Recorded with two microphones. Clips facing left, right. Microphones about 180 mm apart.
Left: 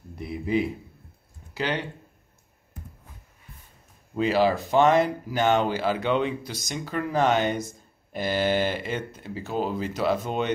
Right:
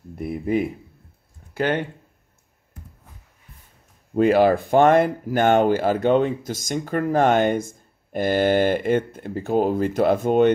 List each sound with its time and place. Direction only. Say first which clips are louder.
0.1 s speech: right 3 dB; 50° right (ahead or behind)
4.1 s speech: right 6 dB; 55° right (ahead or behind)